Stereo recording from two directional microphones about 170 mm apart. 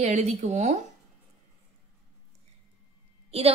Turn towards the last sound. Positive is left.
turn(degrees=-35)  # may be behind; listen again after turning